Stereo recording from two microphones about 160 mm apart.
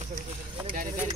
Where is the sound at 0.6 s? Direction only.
60° right (ahead or behind).